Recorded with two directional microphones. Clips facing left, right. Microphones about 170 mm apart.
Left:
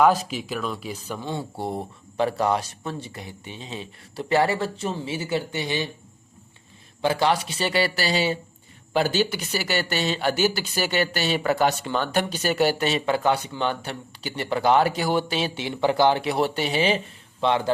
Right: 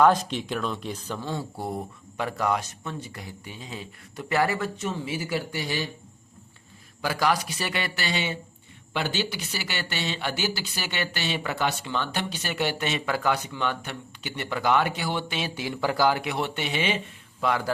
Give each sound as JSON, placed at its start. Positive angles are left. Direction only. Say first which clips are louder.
{"t": 0.0, "sound": "speech", "louder": "left 1 dB", "side_deg": 5}
{"t": 7.0, "sound": "speech", "louder": "left 3 dB", "side_deg": 25}
{"t": 15.4, "sound": "speech", "louder": "left 4 dB", "side_deg": 25}